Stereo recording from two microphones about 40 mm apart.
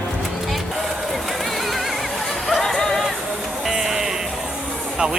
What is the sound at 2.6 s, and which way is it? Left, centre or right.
Music, centre.